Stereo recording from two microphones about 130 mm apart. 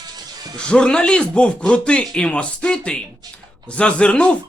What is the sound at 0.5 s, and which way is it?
Speech, 5° left (ahead or behind).